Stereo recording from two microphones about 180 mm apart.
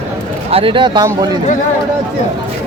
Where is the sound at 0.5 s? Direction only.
30° right (ahead or behind).